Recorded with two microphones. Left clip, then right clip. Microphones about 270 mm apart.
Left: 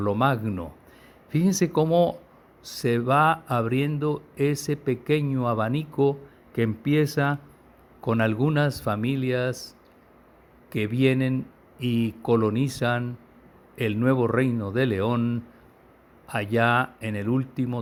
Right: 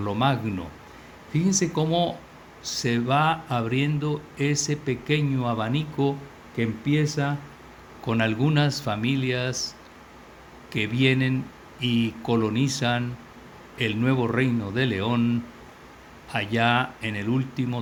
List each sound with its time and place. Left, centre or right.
0.0 s speech: left
10.7 s speech: left